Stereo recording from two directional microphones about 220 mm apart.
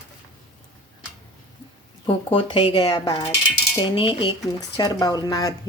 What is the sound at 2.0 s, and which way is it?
Speech, 25° left (ahead or behind).